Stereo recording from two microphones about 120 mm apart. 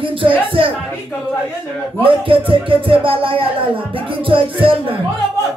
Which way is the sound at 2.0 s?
50° right (ahead or behind).